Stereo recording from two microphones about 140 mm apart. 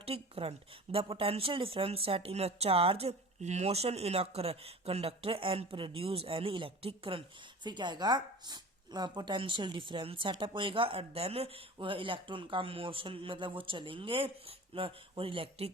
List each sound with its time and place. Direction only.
0.0 s speech: 45° right (ahead or behind)